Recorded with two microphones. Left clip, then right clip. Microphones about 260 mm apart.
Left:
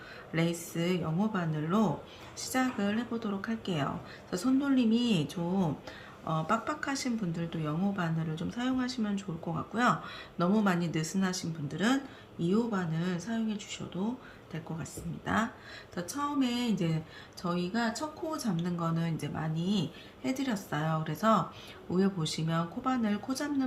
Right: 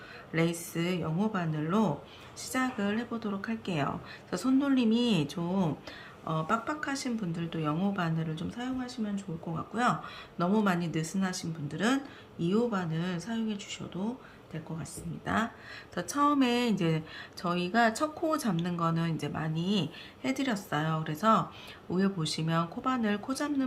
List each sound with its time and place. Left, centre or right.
0.3 s speech: centre
15.3 s speech: centre